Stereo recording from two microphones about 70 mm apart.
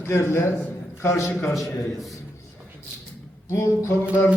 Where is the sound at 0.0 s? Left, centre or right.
Left.